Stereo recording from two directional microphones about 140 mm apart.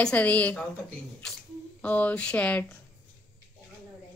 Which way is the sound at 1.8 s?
10° left (ahead or behind).